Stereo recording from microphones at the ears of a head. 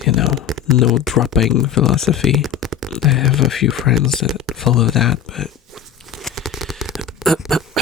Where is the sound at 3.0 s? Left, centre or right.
Left.